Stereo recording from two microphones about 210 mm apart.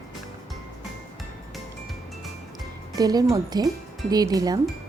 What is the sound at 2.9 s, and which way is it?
Speech, 20° right (ahead or behind).